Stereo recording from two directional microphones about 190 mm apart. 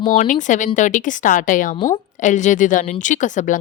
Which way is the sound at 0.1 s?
40° left (ahead or behind).